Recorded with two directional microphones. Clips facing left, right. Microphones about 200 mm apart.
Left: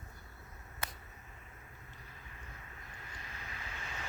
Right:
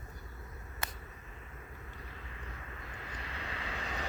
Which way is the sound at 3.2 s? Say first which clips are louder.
Right 7 dB; 85° right.